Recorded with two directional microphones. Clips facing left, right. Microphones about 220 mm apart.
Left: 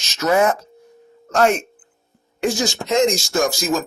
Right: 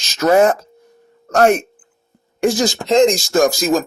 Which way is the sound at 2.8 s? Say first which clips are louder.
Right 5 dB; 35° right (ahead or behind).